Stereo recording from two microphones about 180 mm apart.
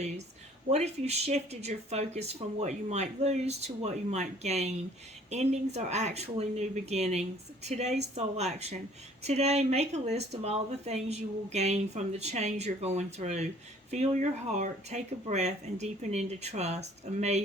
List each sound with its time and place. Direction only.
0.7 s speech: 35° right (ahead or behind)